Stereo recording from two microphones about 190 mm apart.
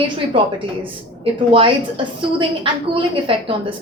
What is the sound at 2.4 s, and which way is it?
A woman's voice, 25° right (ahead or behind).